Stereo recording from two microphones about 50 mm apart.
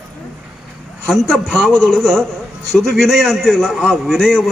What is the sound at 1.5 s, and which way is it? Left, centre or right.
Speech, centre.